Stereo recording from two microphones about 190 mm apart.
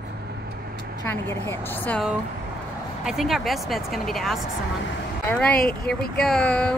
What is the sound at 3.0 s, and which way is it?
A woman's voice, centre (ahead or behind).